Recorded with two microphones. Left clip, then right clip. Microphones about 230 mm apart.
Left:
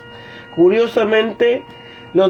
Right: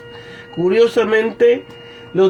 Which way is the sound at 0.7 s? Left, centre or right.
Left.